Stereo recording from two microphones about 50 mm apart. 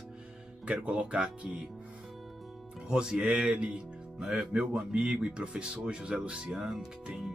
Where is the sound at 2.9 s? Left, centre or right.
Centre.